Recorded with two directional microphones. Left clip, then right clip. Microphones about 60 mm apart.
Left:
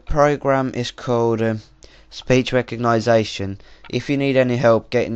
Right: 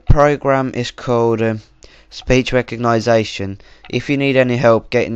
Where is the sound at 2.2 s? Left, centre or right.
Centre.